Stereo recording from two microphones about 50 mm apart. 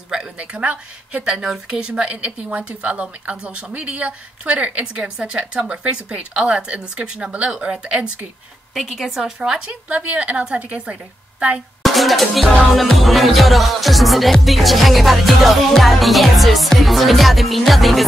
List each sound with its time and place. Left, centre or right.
0.1 s speech: centre
1.2 s a woman's voice: centre
8.7 s music: centre
9.4 s a woman's voice: centre
9.7 s speech: right
11.8 s music: centre